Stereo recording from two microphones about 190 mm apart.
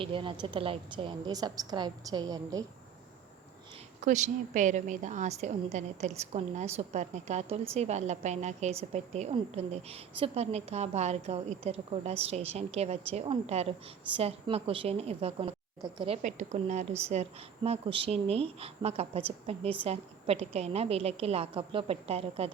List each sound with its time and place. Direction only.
0.0 s a woman's voice: 25° right (ahead or behind)
4.0 s a woman's voice: 40° right (ahead or behind)